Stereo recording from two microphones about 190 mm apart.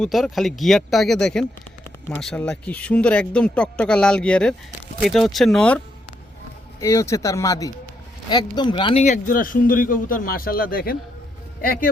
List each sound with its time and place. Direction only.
0.0 s speech: centre (ahead or behind)
6.7 s speech: 15° left (ahead or behind); by 11.9 s 50° left (ahead or behind)